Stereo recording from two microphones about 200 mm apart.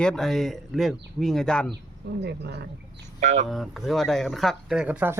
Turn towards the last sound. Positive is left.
turn(degrees=-10)  # may be behind; listen again after turning